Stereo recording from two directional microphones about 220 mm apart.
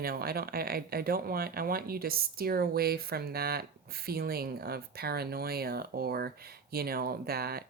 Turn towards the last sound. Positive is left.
turn(degrees=-45)  # may be behind; listen again after turning